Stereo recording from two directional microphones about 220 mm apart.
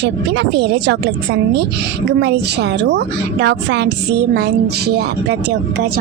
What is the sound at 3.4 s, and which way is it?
Speech, 50° right (ahead or behind).